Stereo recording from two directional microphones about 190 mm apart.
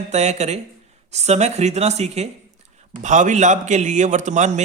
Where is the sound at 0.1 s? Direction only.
35° right (ahead or behind).